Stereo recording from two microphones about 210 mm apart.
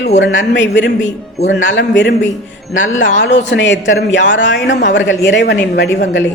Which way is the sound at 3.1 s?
60° left (ahead or behind).